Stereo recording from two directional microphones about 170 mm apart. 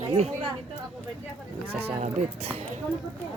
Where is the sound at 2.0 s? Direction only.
40° right (ahead or behind).